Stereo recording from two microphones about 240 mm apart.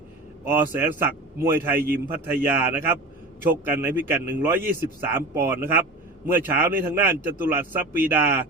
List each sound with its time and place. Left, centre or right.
0.4 s a man's voice: centre